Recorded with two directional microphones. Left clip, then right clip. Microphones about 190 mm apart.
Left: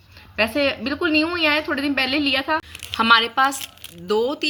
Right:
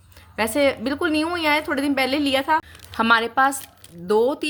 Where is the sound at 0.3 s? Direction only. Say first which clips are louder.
Even; 45° right (ahead or behind).